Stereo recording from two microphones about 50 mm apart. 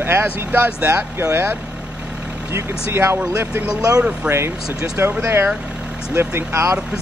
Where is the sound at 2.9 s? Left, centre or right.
Right.